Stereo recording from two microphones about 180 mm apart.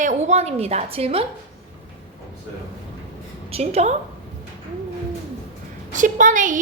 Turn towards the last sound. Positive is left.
turn(degrees=-45)  # may be behind; listen again after turning